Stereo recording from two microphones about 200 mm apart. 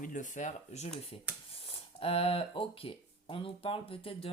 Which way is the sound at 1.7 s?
30° left (ahead or behind).